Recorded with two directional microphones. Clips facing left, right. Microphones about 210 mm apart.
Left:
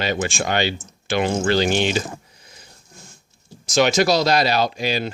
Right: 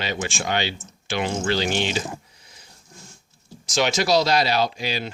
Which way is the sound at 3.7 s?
50° left (ahead or behind).